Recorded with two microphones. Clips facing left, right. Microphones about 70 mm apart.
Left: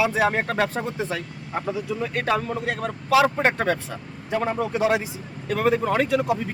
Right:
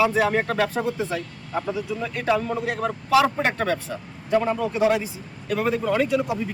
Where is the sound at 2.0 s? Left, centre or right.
Left.